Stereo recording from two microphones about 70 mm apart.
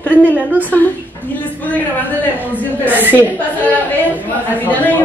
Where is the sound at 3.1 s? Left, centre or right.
Left.